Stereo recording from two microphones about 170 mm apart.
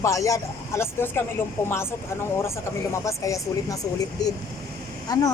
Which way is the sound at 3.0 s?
20° left (ahead or behind).